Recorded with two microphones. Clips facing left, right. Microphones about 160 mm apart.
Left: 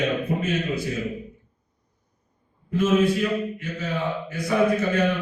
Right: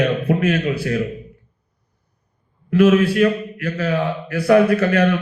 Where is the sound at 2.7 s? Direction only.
75° right (ahead or behind).